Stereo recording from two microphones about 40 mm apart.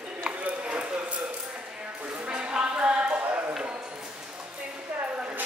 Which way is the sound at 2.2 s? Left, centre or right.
Right.